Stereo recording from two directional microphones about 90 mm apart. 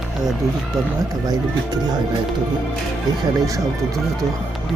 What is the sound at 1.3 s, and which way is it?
Speech, 50° right (ahead or behind).